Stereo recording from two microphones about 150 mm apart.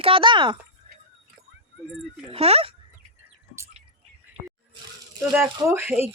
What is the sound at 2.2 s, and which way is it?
Speech, 40° right (ahead or behind).